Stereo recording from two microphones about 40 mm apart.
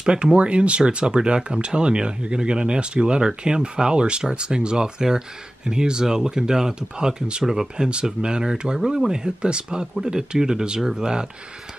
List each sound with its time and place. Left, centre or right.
0.0 s speech: right